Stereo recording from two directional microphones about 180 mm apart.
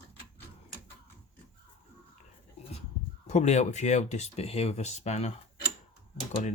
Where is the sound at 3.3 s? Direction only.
40° left (ahead or behind).